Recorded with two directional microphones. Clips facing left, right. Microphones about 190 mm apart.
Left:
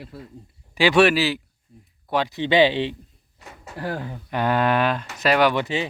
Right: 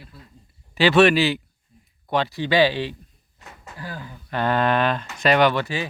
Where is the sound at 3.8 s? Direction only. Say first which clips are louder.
Left 7 dB; 65° left (ahead or behind).